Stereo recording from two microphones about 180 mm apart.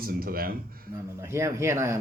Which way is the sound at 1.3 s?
15° right (ahead or behind).